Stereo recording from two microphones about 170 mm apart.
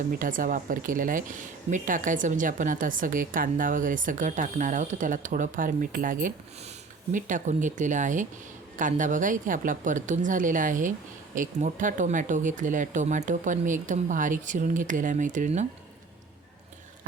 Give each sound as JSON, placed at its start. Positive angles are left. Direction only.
{"t": 0.2, "sound": "speech", "side_deg": -50}